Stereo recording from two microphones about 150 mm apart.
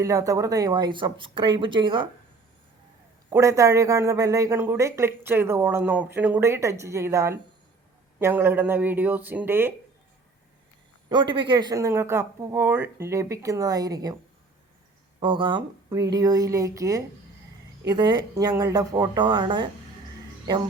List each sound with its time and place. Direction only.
0.0 s speech: 20° right (ahead or behind)
3.2 s a man's voice: 20° right (ahead or behind)
11.1 s speech: 30° right (ahead or behind)
15.2 s speech: 35° right (ahead or behind)